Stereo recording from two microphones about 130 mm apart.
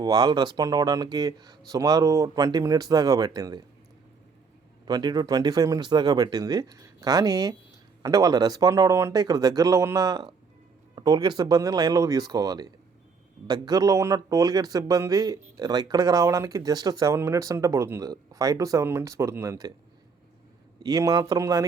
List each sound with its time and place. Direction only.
0.0 s speech: 30° right (ahead or behind)
4.9 s speech: 35° right (ahead or behind)
20.8 s speech: 30° right (ahead or behind)